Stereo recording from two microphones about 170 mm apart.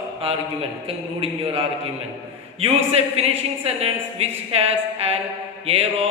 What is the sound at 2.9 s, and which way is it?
Mantra, 35° right (ahead or behind).